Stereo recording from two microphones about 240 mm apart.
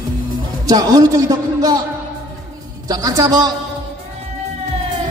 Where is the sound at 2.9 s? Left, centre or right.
Centre.